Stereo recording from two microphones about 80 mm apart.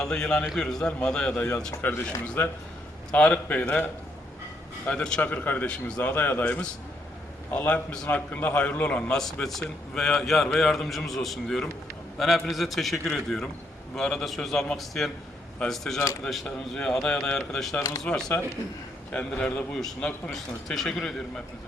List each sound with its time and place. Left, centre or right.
0.0 s speech: centre
2.2 s a man's voice: left
4.9 s a man's voice: centre